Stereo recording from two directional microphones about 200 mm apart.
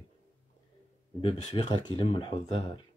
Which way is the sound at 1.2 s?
25° left (ahead or behind).